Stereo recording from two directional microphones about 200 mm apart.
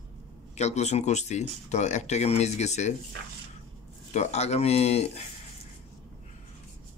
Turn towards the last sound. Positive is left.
turn(degrees=30)  # may be behind; listen again after turning